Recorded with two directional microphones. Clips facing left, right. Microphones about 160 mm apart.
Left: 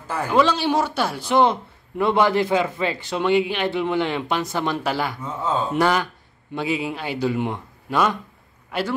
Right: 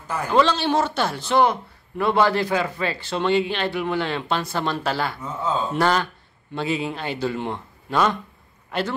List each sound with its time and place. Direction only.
0.3 s speech: 10° left (ahead or behind)
1.4 s a man's voice: 20° left (ahead or behind); by 8.9 s 5° left (ahead or behind)